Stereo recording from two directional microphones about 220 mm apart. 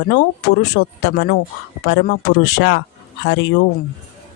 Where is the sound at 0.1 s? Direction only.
50° left (ahead or behind).